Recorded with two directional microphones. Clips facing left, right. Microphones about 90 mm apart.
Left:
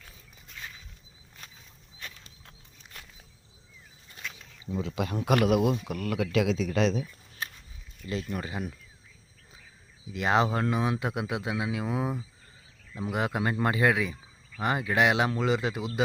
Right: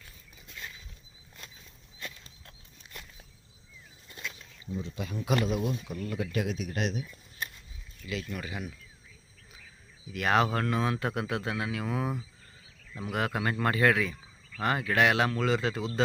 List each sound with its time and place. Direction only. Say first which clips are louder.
4.9 s a man's voice: left 5 dB; 80° left
5.9 s speech: left 5 dB; 85° left
8.2 s speech: left 3 dB; 25° left (ahead or behind)
10.1 s speech: left 1 dB; 20° left (ahead or behind)